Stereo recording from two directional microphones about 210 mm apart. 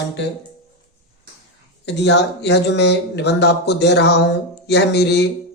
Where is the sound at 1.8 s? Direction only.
55° left (ahead or behind).